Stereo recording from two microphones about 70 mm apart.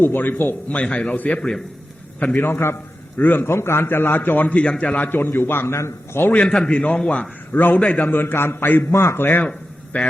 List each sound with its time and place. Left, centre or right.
0.0 s a man's voice: left
0.8 s speech: centre
2.1 s a man's voice: left
4.9 s a man's voice: left
6.2 s a man's voice: left
7.5 s a man's voice: left
9.5 s a sound: centre